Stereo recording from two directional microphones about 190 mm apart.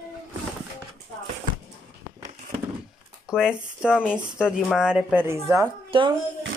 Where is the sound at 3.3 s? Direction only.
5° right (ahead or behind).